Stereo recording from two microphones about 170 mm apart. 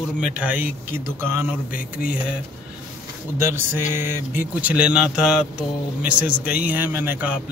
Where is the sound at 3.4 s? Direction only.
15° right (ahead or behind).